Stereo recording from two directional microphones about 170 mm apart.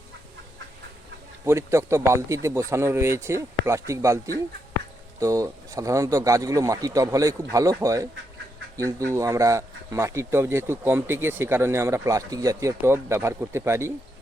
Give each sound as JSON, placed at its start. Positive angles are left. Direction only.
{"t": 1.5, "sound": "speech", "side_deg": -15}
{"t": 5.2, "sound": "speech", "side_deg": -20}